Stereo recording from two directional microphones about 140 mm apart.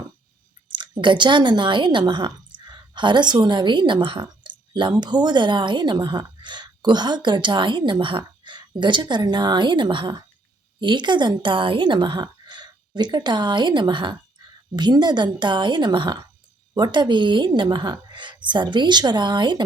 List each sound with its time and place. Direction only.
0.7 s a woman's voice: 35° right (ahead or behind)